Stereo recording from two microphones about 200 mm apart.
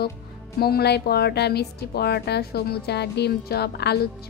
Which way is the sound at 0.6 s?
50° left (ahead or behind).